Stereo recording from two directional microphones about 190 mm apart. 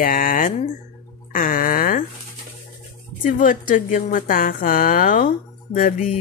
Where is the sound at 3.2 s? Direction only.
45° left (ahead or behind).